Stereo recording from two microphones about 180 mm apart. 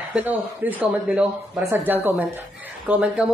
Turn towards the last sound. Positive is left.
turn(degrees=-5)  # may be behind; listen again after turning